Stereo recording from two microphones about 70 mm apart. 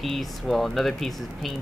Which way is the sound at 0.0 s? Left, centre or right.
Centre.